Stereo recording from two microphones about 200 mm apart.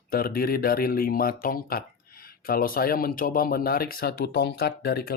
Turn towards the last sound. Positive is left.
turn(degrees=50)  # may be behind; listen again after turning